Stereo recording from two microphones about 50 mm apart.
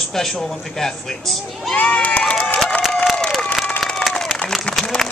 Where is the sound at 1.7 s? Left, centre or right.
Left.